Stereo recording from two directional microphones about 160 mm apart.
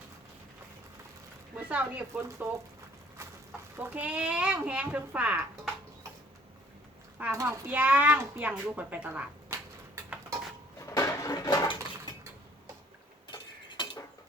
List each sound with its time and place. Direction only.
1.5 s speech: 10° right (ahead or behind)
3.8 s speech: 10° right (ahead or behind)
7.2 s speech: 15° right (ahead or behind)
10.9 s dishes: 20° left (ahead or behind)
13.2 s tick-tock: 30° left (ahead or behind)